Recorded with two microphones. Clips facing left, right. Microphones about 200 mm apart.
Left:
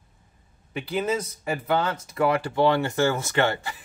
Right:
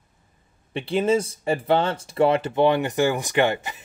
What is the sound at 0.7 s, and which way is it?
Speech, 30° right (ahead or behind).